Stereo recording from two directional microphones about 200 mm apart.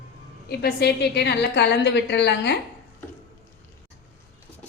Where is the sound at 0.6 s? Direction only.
55° left (ahead or behind).